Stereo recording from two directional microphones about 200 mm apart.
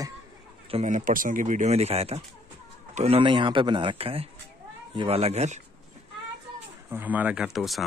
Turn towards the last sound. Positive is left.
turn(degrees=0)  # may be behind; listen again after turning